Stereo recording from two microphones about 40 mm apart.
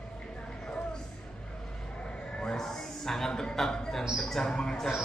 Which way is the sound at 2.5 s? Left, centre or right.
Centre.